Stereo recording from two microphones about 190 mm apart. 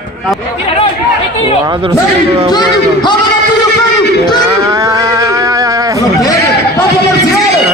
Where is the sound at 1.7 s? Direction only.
25° right (ahead or behind).